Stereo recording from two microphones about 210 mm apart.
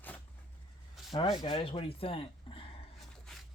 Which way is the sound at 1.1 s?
25° left (ahead or behind).